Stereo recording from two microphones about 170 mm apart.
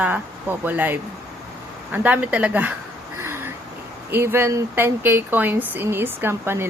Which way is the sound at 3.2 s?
15° right (ahead or behind).